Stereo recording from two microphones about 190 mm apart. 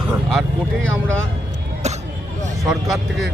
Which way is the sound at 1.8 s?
35° right (ahead or behind).